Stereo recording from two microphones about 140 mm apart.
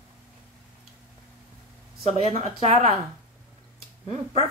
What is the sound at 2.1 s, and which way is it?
Speech, 50° right (ahead or behind).